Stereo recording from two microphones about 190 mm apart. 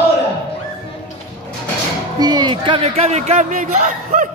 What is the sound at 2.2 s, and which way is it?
A man's voice, 20° right (ahead or behind).